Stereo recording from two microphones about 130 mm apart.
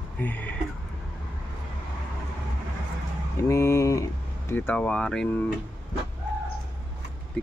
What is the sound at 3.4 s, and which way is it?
Speech, 20° left (ahead or behind).